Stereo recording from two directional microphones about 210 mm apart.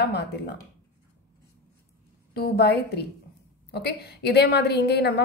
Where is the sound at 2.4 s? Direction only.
50° left (ahead or behind).